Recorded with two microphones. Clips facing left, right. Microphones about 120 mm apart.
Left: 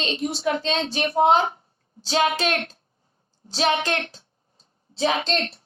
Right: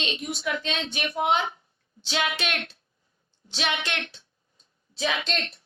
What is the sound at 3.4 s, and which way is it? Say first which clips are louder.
A woman's voice: left 7 dB; 35° left (ahead or behind).